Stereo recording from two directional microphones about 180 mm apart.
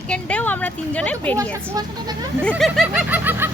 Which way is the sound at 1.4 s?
20° right (ahead or behind).